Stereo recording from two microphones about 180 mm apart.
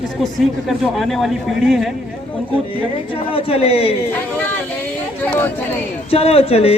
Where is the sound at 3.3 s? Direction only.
35° left (ahead or behind).